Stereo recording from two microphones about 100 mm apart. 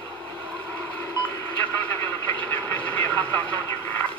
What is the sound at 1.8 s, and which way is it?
Vehicle, 20° left (ahead or behind).